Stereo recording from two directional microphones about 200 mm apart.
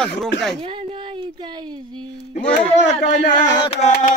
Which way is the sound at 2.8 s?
35° left (ahead or behind).